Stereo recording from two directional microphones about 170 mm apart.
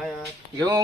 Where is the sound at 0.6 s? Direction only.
20° right (ahead or behind).